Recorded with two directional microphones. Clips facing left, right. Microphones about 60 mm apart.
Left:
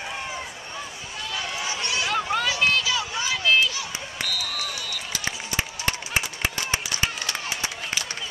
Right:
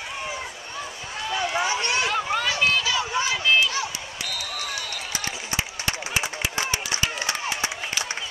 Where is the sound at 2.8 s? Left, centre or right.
Right.